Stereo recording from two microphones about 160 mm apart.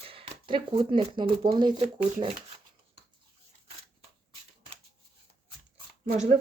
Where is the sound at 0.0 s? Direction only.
35° right (ahead or behind).